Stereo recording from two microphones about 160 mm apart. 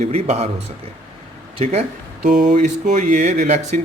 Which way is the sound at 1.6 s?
40° right (ahead or behind).